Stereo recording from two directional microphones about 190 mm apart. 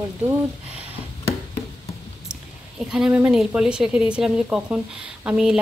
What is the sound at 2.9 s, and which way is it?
Speech, 5° right (ahead or behind).